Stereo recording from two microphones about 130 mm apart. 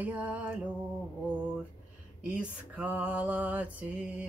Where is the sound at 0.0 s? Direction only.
10° right (ahead or behind).